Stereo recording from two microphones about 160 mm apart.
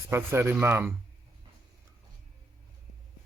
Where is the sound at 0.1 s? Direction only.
15° right (ahead or behind).